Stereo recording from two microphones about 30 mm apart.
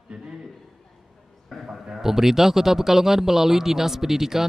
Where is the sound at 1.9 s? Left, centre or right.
Centre.